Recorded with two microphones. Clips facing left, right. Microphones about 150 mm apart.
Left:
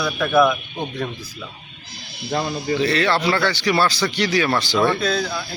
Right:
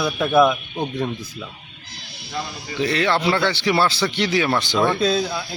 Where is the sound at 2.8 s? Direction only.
20° right (ahead or behind).